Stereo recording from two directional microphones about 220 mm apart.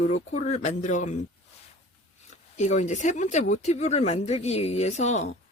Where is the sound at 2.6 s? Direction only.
35° left (ahead or behind).